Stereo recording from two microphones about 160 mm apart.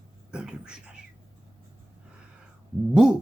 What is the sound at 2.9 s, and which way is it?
Speech, 5° right (ahead or behind).